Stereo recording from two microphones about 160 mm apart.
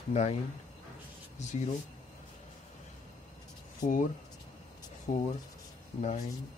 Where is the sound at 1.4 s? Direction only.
45° left (ahead or behind).